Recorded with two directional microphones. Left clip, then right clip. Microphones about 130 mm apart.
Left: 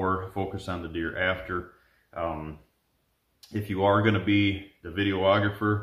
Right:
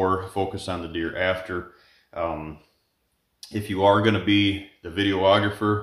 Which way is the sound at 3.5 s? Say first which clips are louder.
Right 4 dB; 30° right (ahead or behind).